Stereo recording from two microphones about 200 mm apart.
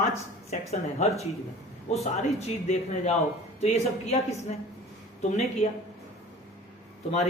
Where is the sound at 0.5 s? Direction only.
30° left (ahead or behind).